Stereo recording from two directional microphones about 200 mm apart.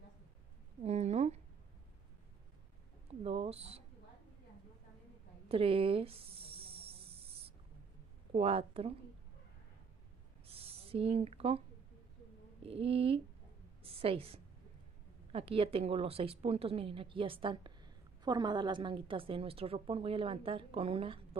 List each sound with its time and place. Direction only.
0.8 s a sound: 30° right (ahead or behind)
3.3 s mouse: 30° right (ahead or behind)
5.5 s a sound: 30° right (ahead or behind)
8.3 s a woman's voice: 30° right (ahead or behind)
10.4 s owl: 30° right (ahead or behind)
12.6 s a woman's voice: 30° right (ahead or behind)